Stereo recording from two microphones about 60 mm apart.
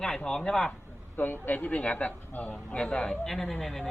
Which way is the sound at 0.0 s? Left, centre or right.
Centre.